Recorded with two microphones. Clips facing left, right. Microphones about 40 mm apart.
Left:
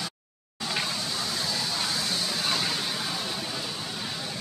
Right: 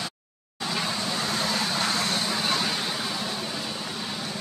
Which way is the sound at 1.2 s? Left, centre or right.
Right.